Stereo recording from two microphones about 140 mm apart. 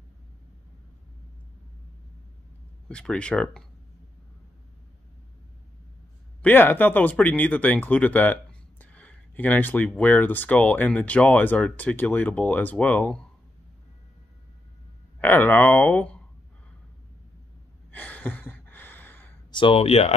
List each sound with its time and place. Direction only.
2.9 s speech: 5° left (ahead or behind)
6.4 s speech: 15° left (ahead or behind)
15.1 s speech: 15° left (ahead or behind)
17.9 s gasp: 10° left (ahead or behind)
19.5 s speech: 40° left (ahead or behind)